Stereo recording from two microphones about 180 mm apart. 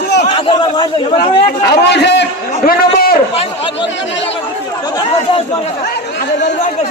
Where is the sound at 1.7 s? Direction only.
70° left (ahead or behind).